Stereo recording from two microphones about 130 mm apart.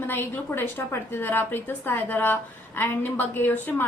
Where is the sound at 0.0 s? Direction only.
15° left (ahead or behind).